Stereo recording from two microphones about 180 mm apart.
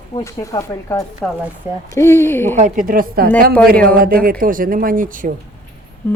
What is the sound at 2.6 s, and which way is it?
Speech, 45° right (ahead or behind).